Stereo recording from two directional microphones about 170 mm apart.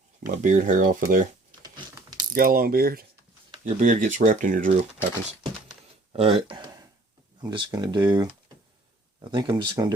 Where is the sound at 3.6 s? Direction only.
45° right (ahead or behind).